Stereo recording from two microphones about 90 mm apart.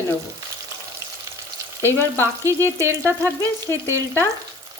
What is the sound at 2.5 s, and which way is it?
Frying, 35° right (ahead or behind).